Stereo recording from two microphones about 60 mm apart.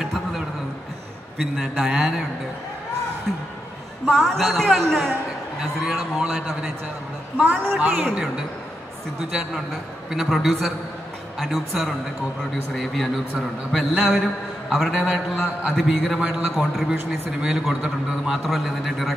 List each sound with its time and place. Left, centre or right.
0.0 s a sound: centre
1.4 s a man's voice: centre
3.3 s a man's voice: centre
5.6 s a man's voice: centre
7.3 s a woman's voice: right
10.1 s a man's voice: centre
14.9 s a man's voice: centre
15.3 s a man's voice: centre
16.2 s a man's voice: right
18.4 s a man's voice: centre